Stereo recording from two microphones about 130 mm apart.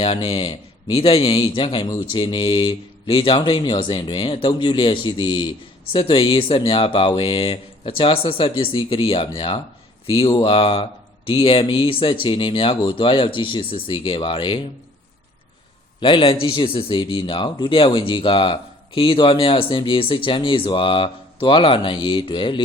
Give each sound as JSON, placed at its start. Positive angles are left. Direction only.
{"t": 0.0, "sound": "speech", "side_deg": 40}
{"t": 16.0, "sound": "speech", "side_deg": 40}